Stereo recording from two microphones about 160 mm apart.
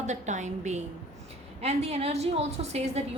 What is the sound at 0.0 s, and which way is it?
A woman's voice, 45° right (ahead or behind).